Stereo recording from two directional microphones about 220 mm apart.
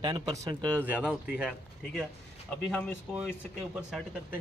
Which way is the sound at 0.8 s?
5° right (ahead or behind).